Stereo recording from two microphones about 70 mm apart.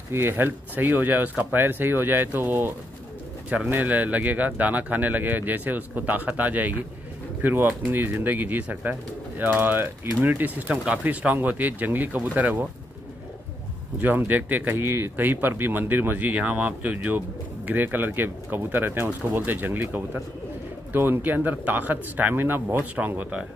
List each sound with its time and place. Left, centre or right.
0.1 s speech: right
3.7 s speech: right
13.9 s speech: right